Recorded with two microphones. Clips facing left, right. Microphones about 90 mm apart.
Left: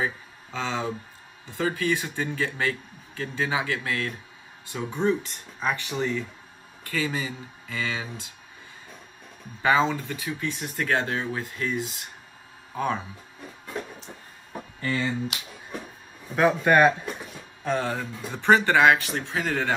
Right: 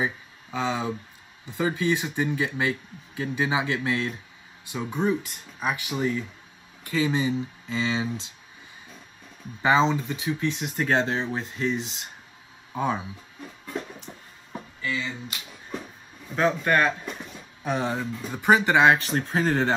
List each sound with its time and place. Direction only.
0.0 s speech: 15° right (ahead or behind)
9.6 s speech: 20° right (ahead or behind)
14.8 s speech: 45° left (ahead or behind)
16.3 s speech: 15° left (ahead or behind)
17.6 s speech: 15° right (ahead or behind)
18.9 s speech: 40° right (ahead or behind)